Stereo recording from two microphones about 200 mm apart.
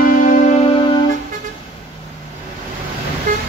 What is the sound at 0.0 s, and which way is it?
Music, 45° left (ahead or behind).